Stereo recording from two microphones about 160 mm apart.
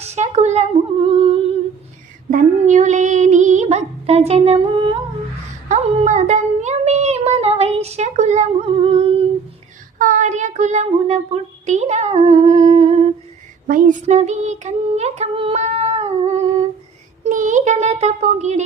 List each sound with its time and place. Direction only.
0.0 s humming: 45° right (ahead or behind)
2.3 s female singing: 50° right (ahead or behind)
5.6 s a sound: 45° right (ahead or behind)
10.0 s child singing: 50° right (ahead or behind)
13.7 s a sound: 55° right (ahead or behind)
17.2 s child singing: 50° right (ahead or behind)